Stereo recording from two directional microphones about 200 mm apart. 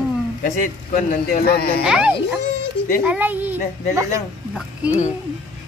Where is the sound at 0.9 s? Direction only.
45° left (ahead or behind).